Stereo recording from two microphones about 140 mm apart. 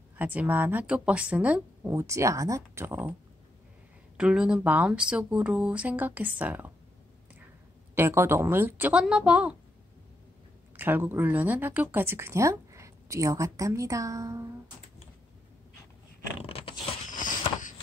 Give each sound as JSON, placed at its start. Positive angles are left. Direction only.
{"t": 0.2, "sound": "speech", "side_deg": -10}
{"t": 4.2, "sound": "speech", "side_deg": -5}
{"t": 7.9, "sound": "a woman's voice", "side_deg": -15}
{"t": 10.8, "sound": "speech", "side_deg": -15}
{"t": 16.3, "sound": "a sound", "side_deg": 40}
{"t": 17.1, "sound": "a sound", "side_deg": 70}